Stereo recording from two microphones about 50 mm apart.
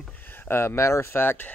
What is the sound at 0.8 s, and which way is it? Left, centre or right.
Speech, left.